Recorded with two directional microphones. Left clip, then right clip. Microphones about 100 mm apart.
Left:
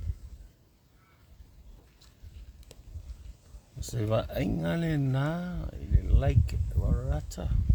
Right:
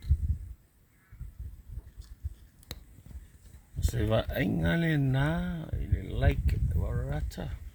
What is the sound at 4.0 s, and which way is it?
Speech, 10° left (ahead or behind).